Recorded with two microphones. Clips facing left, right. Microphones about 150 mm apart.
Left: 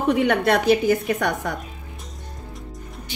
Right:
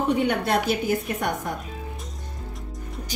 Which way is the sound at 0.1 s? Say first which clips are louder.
Left 6 dB; 90° left.